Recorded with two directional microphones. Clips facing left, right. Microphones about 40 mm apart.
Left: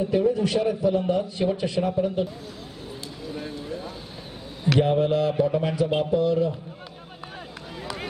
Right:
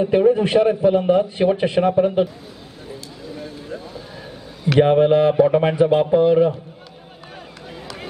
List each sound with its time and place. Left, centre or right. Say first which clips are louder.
0.0 s a man's voice: right 7 dB; right
4.7 s a man's voice: right 8 dB; right